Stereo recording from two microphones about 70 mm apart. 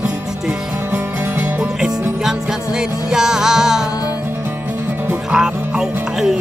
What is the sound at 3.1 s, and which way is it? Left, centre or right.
Music, centre.